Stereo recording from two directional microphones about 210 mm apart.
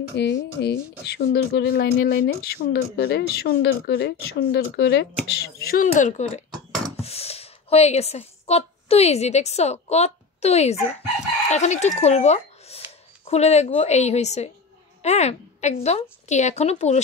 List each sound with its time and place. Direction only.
0.1 s a woman's voice: 55° left (ahead or behind); by 17.0 s 30° left (ahead or behind)